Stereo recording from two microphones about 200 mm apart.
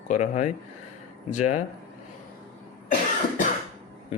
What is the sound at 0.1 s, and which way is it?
Speech, 35° left (ahead or behind).